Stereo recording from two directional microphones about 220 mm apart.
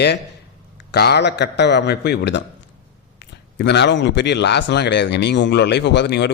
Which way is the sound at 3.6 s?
50° left (ahead or behind).